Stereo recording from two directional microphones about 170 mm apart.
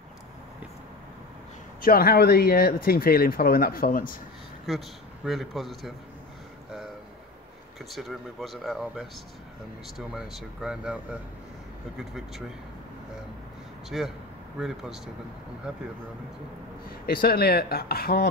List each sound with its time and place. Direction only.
1.8 s speech: 60° left (ahead or behind)
4.6 s speech: centre (ahead or behind)
7.9 s speech: centre (ahead or behind)
13.8 s speech: centre (ahead or behind)
17.0 s speech: 60° left (ahead or behind)